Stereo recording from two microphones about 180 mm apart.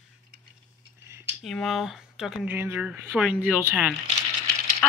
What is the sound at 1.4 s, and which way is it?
Speech, centre (ahead or behind).